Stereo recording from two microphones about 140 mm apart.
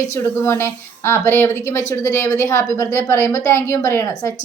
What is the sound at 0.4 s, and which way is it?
A woman's voice, 20° left (ahead or behind).